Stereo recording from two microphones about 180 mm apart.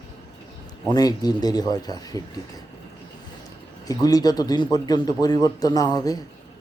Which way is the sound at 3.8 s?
20° left (ahead or behind).